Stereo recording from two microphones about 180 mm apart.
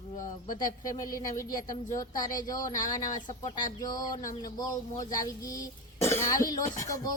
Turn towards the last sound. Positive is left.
turn(degrees=20)  # may be behind; listen again after turning